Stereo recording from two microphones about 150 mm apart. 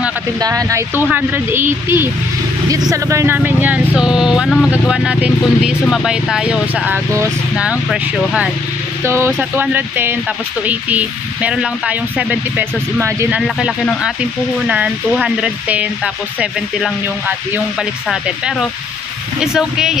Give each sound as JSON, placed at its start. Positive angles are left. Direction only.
{"t": 0.4, "sound": "speech", "side_deg": -25}
{"t": 9.0, "sound": "speech", "side_deg": -15}
{"t": 15.1, "sound": "speech", "side_deg": -5}
{"t": 18.0, "sound": "speech", "side_deg": -5}